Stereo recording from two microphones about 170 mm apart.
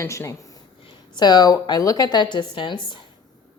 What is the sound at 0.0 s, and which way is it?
Speech, 15° left (ahead or behind).